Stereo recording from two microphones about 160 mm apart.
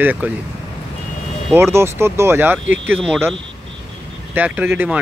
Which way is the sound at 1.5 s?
15° right (ahead or behind).